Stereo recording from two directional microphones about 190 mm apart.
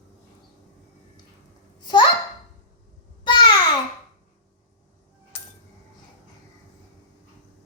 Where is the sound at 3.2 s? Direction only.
25° left (ahead or behind).